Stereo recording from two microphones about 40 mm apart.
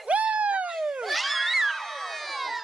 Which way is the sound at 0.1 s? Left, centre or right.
Right.